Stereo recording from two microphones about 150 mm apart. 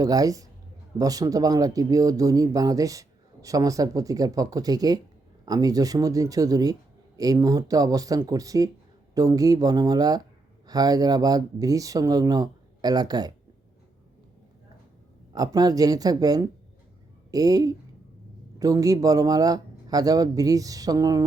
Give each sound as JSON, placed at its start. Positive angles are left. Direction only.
{"t": 0.0, "sound": "speech", "side_deg": -25}
{"t": 15.4, "sound": "speech", "side_deg": -25}